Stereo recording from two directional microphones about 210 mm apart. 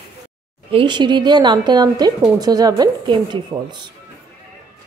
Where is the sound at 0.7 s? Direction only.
25° right (ahead or behind).